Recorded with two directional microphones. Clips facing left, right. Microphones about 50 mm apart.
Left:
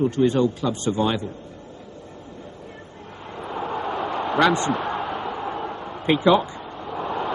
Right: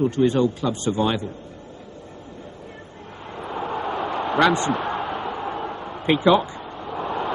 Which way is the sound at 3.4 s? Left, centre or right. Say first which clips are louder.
Even; right.